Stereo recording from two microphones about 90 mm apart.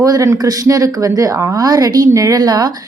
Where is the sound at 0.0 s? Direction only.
40° right (ahead or behind).